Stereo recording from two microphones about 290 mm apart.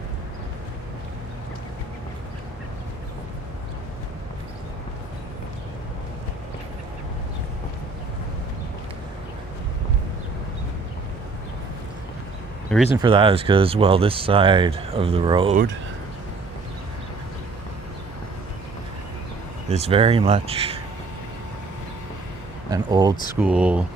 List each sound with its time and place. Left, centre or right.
13.0 s speech: centre
19.7 s speech: centre
22.7 s speech: centre